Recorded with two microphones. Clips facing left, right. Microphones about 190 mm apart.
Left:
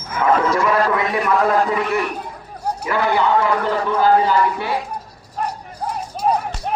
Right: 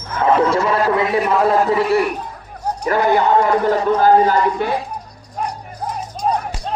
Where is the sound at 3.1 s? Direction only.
45° right (ahead or behind).